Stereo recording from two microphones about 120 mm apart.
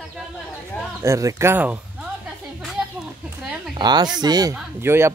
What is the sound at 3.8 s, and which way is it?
Speech, 35° right (ahead or behind).